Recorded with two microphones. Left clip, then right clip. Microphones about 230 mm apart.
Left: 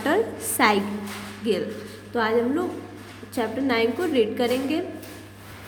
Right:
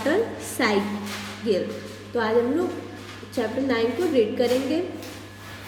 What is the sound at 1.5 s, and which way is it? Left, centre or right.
Speech, left.